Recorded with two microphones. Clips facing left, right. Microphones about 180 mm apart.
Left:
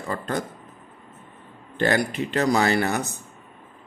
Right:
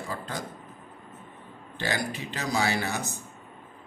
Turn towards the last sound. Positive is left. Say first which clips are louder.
# left 7 dB
turn(degrees=60)  # may be behind; listen again after turning